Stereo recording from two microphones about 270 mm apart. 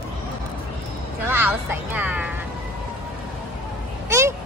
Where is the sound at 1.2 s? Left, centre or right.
Centre.